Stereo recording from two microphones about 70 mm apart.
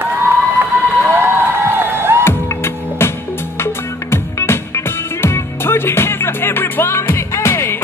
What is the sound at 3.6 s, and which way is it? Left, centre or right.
Music, left.